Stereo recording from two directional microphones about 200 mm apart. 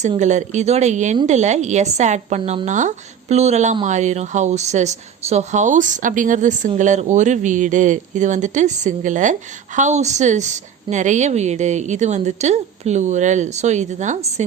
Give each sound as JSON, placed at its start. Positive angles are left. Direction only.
{"t": 0.2, "sound": "speech", "side_deg": -35}